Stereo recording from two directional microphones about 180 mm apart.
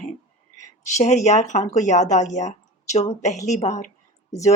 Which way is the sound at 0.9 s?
40° left (ahead or behind).